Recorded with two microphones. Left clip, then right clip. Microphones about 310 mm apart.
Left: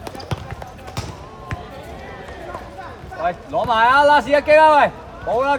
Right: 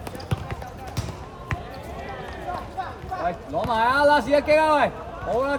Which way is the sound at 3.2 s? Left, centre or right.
Centre.